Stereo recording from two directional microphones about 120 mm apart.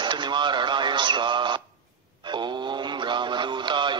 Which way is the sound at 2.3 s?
40° right (ahead or behind).